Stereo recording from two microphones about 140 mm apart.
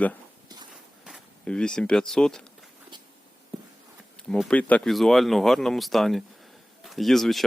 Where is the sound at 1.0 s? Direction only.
Centre (ahead or behind).